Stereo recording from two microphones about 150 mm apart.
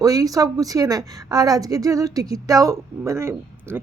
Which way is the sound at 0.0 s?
25° right (ahead or behind).